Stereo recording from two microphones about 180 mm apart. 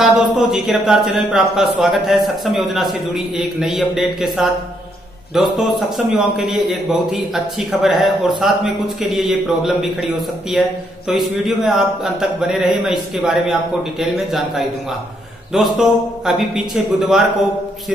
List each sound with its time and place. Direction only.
0.0 s speech: centre (ahead or behind)